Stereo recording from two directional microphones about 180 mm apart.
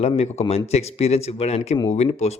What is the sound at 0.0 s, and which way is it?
Speech, 35° left (ahead or behind).